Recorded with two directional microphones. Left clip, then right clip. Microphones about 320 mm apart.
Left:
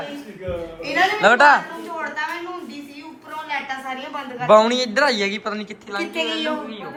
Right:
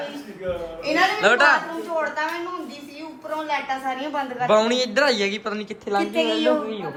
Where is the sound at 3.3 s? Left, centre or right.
Right.